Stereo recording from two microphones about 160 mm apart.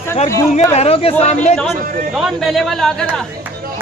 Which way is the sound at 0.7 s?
40° left (ahead or behind).